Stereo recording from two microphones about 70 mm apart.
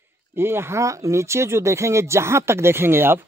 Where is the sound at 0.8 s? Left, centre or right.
Right.